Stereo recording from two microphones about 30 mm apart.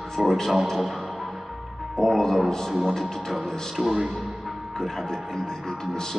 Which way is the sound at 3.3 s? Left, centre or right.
Centre.